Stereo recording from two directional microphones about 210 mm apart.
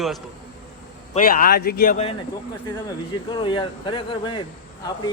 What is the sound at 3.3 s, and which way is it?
Speech, 20° left (ahead or behind).